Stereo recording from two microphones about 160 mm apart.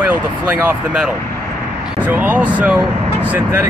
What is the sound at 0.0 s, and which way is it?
Speech, 10° right (ahead or behind).